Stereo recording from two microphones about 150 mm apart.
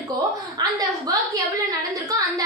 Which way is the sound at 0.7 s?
25° right (ahead or behind).